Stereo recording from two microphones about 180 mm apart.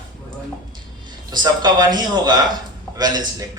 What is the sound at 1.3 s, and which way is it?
A man's voice, 25° right (ahead or behind).